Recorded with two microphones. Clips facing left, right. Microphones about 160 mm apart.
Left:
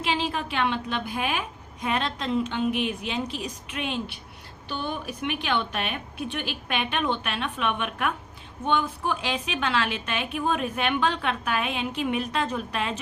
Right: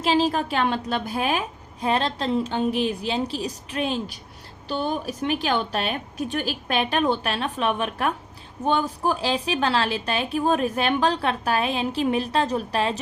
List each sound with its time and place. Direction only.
0.0 s a woman's voice: 40° right (ahead or behind)